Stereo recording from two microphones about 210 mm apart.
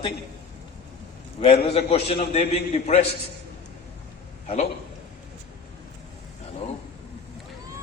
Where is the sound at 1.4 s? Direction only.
30° left (ahead or behind).